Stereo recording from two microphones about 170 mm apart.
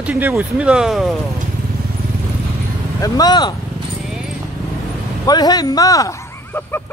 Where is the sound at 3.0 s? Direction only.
25° left (ahead or behind).